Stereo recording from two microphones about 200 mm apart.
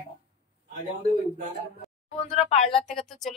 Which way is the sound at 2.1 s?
30° left (ahead or behind).